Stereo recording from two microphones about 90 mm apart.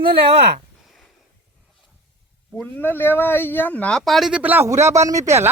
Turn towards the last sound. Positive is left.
turn(degrees=-30)  # may be behind; listen again after turning